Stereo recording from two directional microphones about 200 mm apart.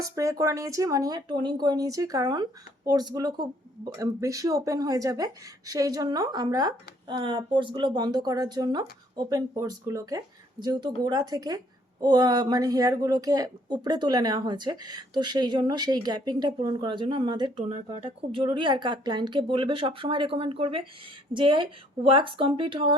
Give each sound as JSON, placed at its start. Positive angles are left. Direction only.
{"t": 0.0, "sound": "speech", "side_deg": -15}